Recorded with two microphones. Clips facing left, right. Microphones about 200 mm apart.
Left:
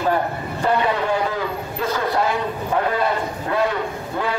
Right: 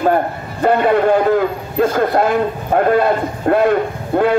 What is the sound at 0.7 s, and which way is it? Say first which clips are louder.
A man's voice: right 8 dB; 55° right (ahead or behind).